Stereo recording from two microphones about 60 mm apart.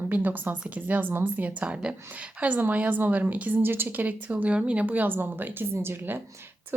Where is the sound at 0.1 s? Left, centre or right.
Right.